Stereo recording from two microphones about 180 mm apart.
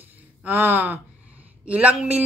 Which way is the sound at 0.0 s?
10° right (ahead or behind).